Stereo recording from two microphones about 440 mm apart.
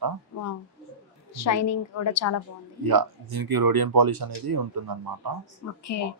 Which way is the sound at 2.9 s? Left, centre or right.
Right.